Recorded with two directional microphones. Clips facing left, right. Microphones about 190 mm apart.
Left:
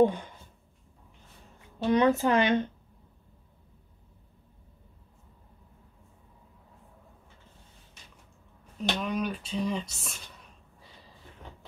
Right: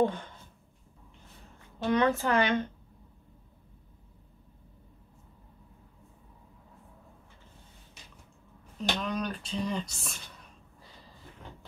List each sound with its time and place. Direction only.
0.0 s speech: 15° left (ahead or behind)
1.9 s a woman's voice: 20° left (ahead or behind)
8.8 s speech: 5° left (ahead or behind)